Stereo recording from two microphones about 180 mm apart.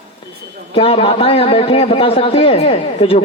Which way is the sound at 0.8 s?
35° left (ahead or behind).